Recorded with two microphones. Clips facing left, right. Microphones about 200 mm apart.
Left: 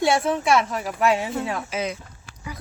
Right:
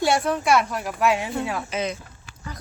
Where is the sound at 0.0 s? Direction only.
Centre (ahead or behind).